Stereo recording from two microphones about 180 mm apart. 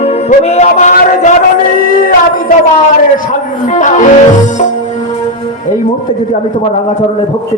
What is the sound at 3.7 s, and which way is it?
Music, 45° left (ahead or behind).